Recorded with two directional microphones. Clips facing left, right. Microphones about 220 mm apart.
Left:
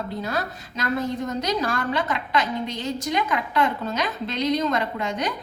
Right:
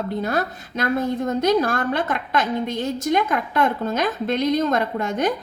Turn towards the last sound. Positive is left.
turn(degrees=-50)  # may be behind; listen again after turning